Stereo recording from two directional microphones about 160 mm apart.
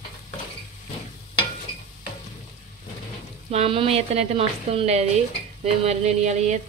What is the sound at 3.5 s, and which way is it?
Speech, 40° right (ahead or behind).